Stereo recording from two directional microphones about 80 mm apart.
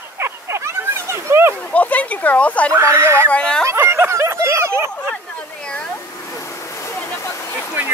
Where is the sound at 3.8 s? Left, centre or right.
Right.